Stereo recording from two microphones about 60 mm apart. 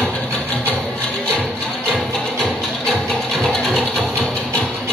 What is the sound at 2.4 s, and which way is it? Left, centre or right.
Music, centre.